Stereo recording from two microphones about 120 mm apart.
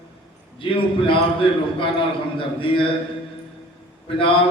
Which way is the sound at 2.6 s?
45° left (ahead or behind).